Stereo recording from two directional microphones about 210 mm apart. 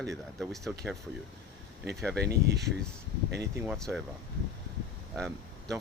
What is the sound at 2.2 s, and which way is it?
Speech, 50° right (ahead or behind).